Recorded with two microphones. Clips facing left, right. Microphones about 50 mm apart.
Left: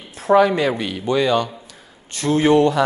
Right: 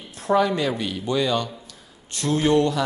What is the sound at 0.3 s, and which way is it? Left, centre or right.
Speech, left.